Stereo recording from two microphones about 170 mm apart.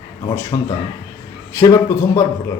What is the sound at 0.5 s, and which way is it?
Speech, 25° left (ahead or behind).